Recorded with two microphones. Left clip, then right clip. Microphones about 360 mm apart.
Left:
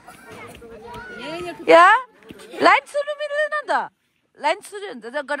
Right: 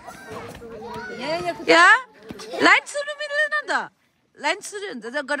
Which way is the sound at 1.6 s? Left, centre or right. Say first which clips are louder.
Left 3 dB; centre.